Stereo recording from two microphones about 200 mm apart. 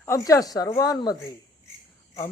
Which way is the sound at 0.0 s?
15° left (ahead or behind).